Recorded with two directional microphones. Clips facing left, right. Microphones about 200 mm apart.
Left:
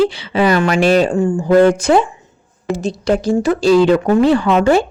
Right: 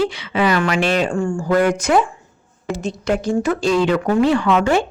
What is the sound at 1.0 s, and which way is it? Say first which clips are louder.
A woman's voice: left 5 dB; 20° left (ahead or behind).